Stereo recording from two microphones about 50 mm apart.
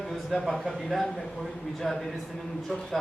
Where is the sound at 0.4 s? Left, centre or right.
Centre.